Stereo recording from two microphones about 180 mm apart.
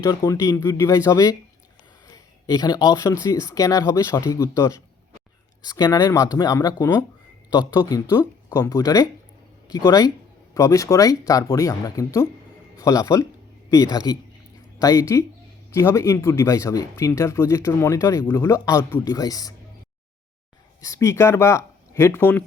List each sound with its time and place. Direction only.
0.0 s speech: 20° left (ahead or behind)
2.0 s a sound: 20° left (ahead or behind)
3.2 s speech: 15° left (ahead or behind)
20.8 s speech: 15° left (ahead or behind)